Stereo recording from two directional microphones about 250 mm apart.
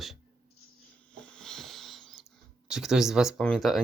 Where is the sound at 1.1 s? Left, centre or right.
Centre.